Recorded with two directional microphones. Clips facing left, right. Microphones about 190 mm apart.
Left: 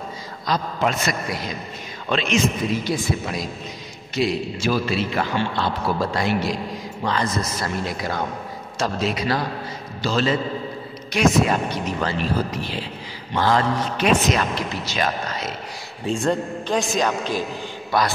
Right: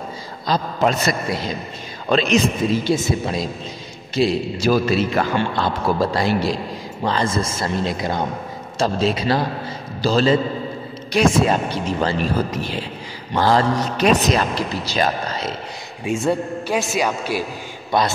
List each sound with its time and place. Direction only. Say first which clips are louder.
0.5 s a man's voice: right 3 dB; 35° right (ahead or behind)
12.4 s speech: right 3 dB; 45° right (ahead or behind)
13.3 s a man's voice: right 3 dB; 35° right (ahead or behind)
16.0 s a man's voice: right 2 dB; 10° right (ahead or behind)
17.9 s a man's voice: right 2 dB; 20° right (ahead or behind)